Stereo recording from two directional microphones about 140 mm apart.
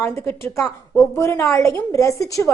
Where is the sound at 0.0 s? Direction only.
15° left (ahead or behind).